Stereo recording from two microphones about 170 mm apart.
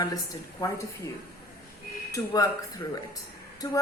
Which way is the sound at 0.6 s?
15° left (ahead or behind).